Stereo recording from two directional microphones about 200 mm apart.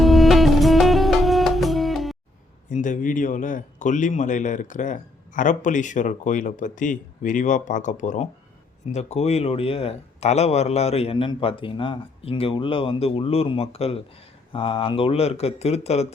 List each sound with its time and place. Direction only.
0.0 s music: centre (ahead or behind)
2.6 s a man's voice: 40° left (ahead or behind)